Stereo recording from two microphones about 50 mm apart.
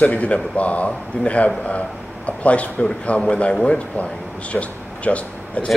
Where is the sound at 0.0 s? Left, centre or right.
Left.